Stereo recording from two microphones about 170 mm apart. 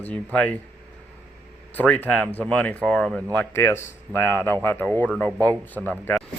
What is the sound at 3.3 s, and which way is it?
Speech, 15° left (ahead or behind).